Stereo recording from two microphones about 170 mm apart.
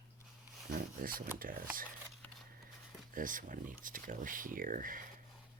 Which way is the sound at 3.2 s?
50° right (ahead or behind).